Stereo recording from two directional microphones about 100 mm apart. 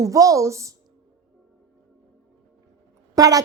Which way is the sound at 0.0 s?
35° right (ahead or behind).